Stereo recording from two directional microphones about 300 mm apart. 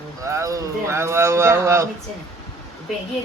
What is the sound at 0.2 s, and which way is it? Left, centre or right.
Speech, centre.